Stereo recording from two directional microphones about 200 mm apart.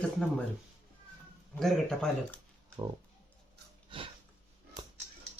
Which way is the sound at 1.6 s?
5° left (ahead or behind).